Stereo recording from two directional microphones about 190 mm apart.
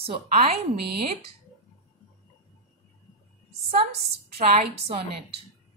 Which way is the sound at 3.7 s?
35° right (ahead or behind).